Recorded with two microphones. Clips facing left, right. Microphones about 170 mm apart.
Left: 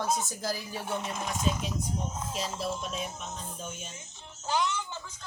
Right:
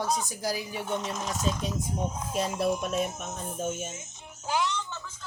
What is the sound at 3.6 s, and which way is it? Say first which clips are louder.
Speech: right 9 dB; 50° right (ahead or behind).